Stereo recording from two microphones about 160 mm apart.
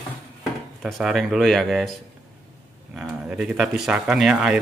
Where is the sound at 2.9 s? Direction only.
5° right (ahead or behind).